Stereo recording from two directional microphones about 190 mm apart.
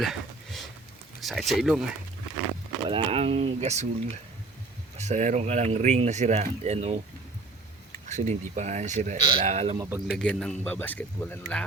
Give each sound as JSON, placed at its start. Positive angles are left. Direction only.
{"t": 0.0, "sound": "a sound", "side_deg": 0}
{"t": 1.2, "sound": "speech", "side_deg": 0}
{"t": 2.9, "sound": "speech", "side_deg": -30}
{"t": 4.9, "sound": "speech", "side_deg": -40}
{"t": 8.0, "sound": "speech", "side_deg": -40}
{"t": 9.7, "sound": "speech", "side_deg": -15}
{"t": 10.1, "sound": "speech", "side_deg": 5}